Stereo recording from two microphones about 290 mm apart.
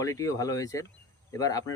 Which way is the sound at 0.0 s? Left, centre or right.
Centre.